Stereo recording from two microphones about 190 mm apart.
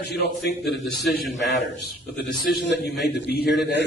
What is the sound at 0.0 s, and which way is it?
A man's voice, 60° left (ahead or behind).